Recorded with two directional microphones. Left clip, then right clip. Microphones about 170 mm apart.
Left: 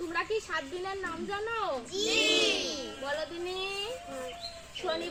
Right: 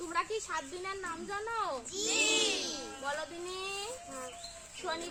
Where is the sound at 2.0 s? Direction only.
10° right (ahead or behind).